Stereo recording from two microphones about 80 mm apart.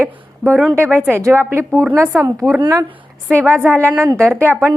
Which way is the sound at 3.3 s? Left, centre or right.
Right.